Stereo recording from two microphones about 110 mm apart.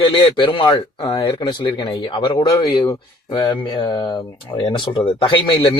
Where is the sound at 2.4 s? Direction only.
30° left (ahead or behind).